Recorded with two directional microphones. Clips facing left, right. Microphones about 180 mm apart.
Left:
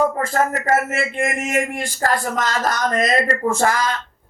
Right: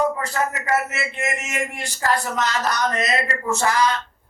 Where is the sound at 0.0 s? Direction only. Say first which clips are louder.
Left 3 dB; 50° left (ahead or behind).